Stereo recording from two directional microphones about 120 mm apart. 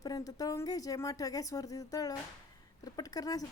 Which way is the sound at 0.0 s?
30° left (ahead or behind).